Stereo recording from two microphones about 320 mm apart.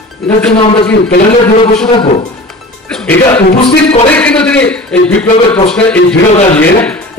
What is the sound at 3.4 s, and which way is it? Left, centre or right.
Speech, centre.